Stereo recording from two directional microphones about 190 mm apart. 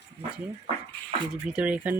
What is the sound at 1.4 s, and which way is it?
Speech, 5° right (ahead or behind).